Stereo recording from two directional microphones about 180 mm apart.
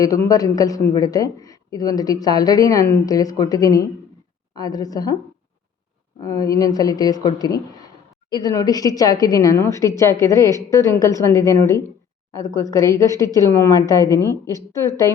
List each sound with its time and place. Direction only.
0.0 s a man's voice: 20° left (ahead or behind)
6.2 s a man's voice: 20° left (ahead or behind)